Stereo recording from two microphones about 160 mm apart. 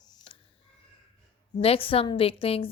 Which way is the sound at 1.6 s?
35° left (ahead or behind).